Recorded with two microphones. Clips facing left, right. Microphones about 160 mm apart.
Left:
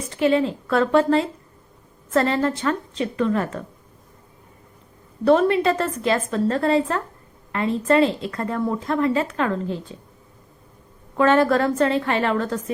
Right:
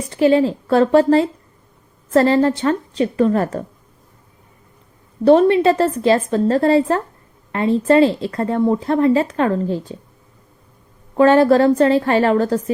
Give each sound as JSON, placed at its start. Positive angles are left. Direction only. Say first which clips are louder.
{"t": 0.2, "sound": "a woman's voice", "louder": "right 5 dB", "side_deg": -35}
{"t": 5.2, "sound": "a woman's voice", "louder": "right 5 dB", "side_deg": -30}
{"t": 11.2, "sound": "a woman's voice", "louder": "right 6 dB", "side_deg": -30}